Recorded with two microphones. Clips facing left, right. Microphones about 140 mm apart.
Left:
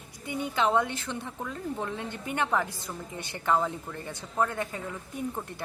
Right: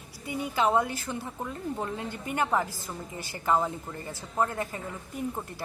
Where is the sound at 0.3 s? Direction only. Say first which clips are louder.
Right 1 dB; 5° right (ahead or behind).